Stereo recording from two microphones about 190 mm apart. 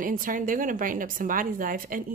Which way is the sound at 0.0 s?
45° right (ahead or behind).